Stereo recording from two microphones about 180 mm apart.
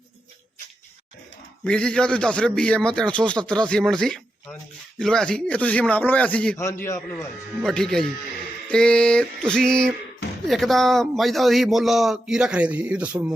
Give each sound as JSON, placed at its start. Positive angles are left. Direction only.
{"t": 1.6, "sound": "a man's voice", "side_deg": 5}
{"t": 7.6, "sound": "a man's voice", "side_deg": 5}